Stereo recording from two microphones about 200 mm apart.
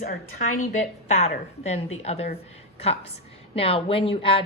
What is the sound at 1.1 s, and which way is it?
A woman's voice, 30° left (ahead or behind).